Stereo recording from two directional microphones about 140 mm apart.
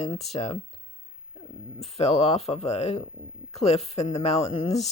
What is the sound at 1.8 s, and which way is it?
Speech, 50° left (ahead or behind).